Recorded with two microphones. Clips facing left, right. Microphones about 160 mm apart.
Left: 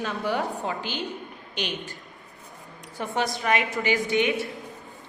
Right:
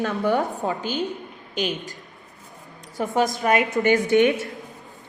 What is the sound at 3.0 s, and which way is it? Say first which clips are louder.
A woman's voice: right 6 dB; 45° right (ahead or behind).